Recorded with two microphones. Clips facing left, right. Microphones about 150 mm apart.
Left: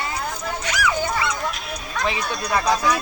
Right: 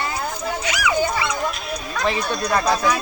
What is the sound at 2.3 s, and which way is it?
Speech, 5° left (ahead or behind).